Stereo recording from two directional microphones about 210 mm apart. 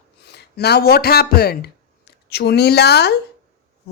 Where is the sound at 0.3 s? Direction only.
50° left (ahead or behind).